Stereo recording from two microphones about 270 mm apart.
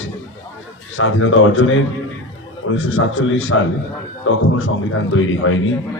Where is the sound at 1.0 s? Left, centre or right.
Left.